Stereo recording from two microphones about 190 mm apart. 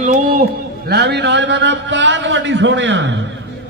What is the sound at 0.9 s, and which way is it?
A man's voice, 65° right (ahead or behind).